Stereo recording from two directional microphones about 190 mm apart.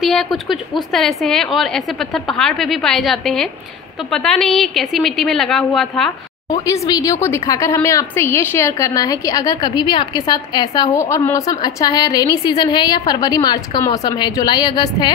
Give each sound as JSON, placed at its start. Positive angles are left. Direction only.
{"t": 0.0, "sound": "a woman's voice", "side_deg": 0}
{"t": 6.5, "sound": "a woman's voice", "side_deg": 15}